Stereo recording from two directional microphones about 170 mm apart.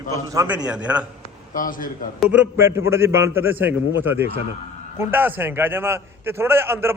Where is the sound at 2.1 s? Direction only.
10° right (ahead or behind).